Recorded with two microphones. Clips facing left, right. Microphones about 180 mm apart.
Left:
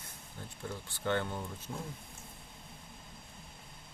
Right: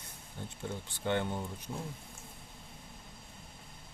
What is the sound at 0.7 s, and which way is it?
Speech, 20° right (ahead or behind).